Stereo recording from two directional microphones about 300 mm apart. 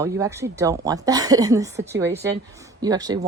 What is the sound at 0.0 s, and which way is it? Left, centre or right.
A woman's voice, centre.